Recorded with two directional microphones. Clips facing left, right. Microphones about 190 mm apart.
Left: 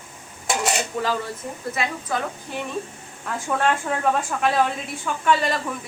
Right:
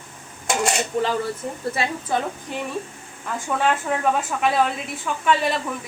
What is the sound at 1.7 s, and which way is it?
Speech, 30° right (ahead or behind).